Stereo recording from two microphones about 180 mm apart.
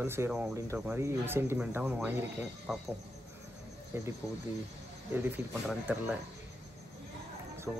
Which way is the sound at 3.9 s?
15° right (ahead or behind).